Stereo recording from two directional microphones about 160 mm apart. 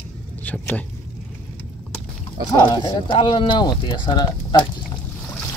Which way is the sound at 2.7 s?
30° left (ahead or behind).